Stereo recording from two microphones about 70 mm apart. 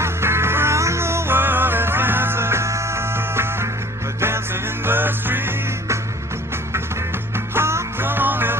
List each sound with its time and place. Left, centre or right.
0.0 s music: right
7.3 s music: right